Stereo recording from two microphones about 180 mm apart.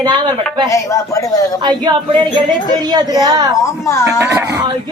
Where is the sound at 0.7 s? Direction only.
15° left (ahead or behind).